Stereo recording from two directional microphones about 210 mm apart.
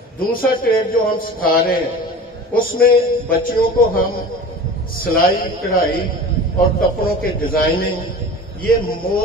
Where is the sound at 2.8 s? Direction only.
45° left (ahead or behind).